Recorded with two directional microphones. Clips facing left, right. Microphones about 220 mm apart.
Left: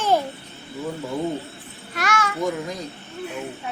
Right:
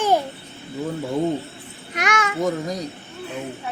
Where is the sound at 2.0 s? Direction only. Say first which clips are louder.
Right 1 dB; 20° right (ahead or behind).